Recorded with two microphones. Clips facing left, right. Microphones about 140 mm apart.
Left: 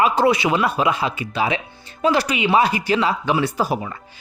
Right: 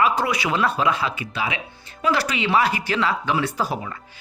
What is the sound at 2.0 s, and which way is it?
Speech, 20° left (ahead or behind).